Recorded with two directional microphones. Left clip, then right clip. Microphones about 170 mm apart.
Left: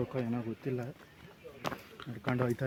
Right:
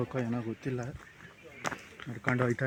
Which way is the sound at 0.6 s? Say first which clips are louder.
Left 1 dB; 80° right.